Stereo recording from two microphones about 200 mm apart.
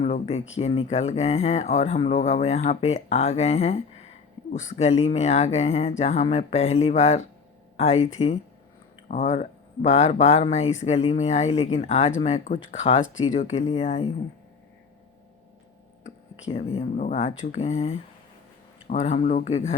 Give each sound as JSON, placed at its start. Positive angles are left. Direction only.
{"t": 0.0, "sound": "speech", "side_deg": 35}
{"t": 16.5, "sound": "speech", "side_deg": 35}